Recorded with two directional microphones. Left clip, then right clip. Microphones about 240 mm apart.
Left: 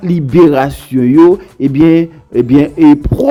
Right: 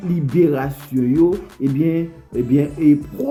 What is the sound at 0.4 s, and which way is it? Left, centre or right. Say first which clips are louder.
Music: left 10 dB; left.